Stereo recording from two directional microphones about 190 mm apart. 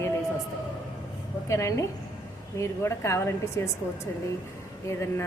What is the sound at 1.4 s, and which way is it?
Speech, 15° left (ahead or behind).